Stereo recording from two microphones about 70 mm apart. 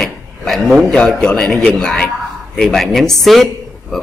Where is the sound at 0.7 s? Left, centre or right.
Centre.